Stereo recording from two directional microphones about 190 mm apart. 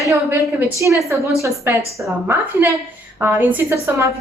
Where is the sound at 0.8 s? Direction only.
15° right (ahead or behind).